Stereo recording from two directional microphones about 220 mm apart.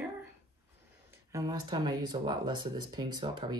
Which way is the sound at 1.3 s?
15° right (ahead or behind).